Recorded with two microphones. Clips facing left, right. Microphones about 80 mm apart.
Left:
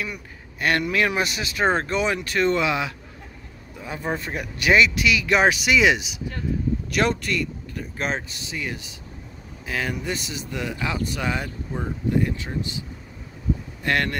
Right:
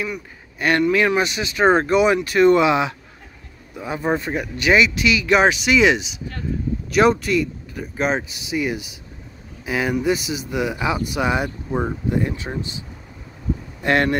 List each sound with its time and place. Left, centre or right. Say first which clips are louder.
0.0 s a man's voice: right 5 dB; centre; by 3.0 s right
4.1 s speech: right 6 dB; right
4.4 s speech: even; centre; by 12.4 s right
13.8 s speech: right 5 dB; right